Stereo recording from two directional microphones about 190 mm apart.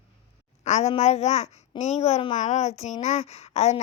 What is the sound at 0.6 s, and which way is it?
A woman's voice, 35° left (ahead or behind).